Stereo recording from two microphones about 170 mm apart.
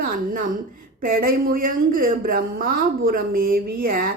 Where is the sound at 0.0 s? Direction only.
55° right (ahead or behind).